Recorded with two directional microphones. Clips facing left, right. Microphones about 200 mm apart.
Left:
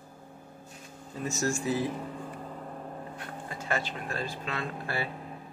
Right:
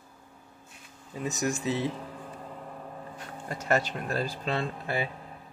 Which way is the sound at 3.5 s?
40° right (ahead or behind).